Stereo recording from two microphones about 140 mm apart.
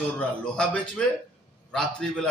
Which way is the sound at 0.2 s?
5° left (ahead or behind).